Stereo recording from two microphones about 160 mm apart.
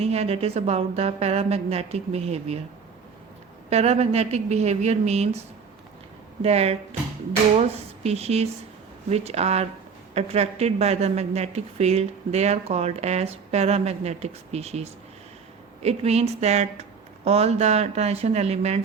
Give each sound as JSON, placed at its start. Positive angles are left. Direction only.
{"t": 0.0, "sound": "a woman's voice", "side_deg": -40}
{"t": 3.7, "sound": "a woman's voice", "side_deg": -40}
{"t": 6.4, "sound": "a woman's voice", "side_deg": -40}